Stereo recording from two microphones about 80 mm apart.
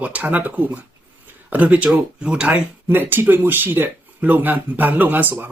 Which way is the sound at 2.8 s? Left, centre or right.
Right.